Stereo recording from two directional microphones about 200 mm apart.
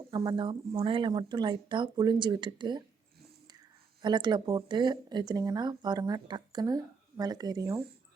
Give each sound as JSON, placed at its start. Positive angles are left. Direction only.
{"t": 0.1, "sound": "speech", "side_deg": -25}
{"t": 4.0, "sound": "speech", "side_deg": -20}